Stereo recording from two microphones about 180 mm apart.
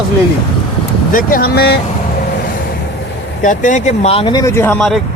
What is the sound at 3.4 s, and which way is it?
Speech, 45° left (ahead or behind).